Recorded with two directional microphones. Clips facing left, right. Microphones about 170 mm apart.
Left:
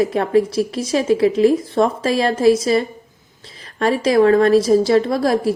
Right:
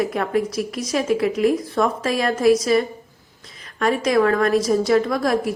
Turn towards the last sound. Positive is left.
turn(degrees=30)  # may be behind; listen again after turning